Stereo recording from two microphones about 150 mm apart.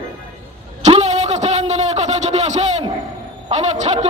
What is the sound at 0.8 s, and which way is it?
A man's voice, 50° right (ahead or behind).